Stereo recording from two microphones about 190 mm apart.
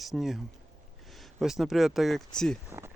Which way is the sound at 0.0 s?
Centre (ahead or behind).